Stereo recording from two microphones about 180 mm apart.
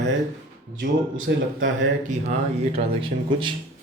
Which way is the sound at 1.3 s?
90° right.